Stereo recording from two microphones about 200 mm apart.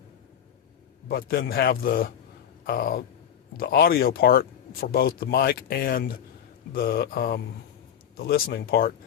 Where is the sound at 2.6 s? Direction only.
45° left (ahead or behind).